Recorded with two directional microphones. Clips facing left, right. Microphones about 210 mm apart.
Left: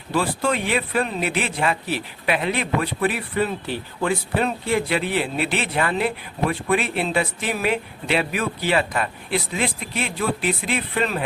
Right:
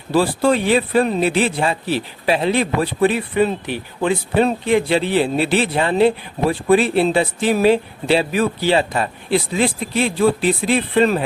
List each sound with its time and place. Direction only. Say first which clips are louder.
0.1 s speech: right 6 dB; 35° right (ahead or behind)